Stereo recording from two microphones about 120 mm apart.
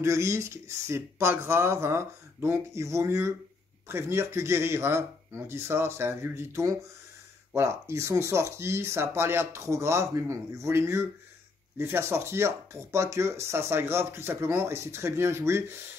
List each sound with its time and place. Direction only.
0.0 s speech: 25° right (ahead or behind)